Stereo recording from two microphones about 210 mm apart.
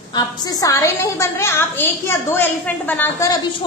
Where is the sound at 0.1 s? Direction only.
20° left (ahead or behind).